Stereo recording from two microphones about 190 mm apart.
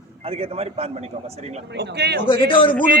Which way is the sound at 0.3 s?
30° right (ahead or behind).